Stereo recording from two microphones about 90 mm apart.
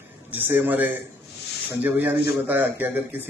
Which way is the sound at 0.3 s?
20° right (ahead or behind).